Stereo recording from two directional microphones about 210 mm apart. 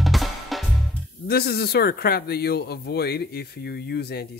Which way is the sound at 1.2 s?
45° left (ahead or behind).